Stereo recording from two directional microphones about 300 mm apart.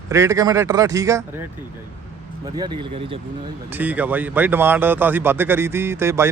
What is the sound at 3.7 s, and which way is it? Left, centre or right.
A man's voice, centre.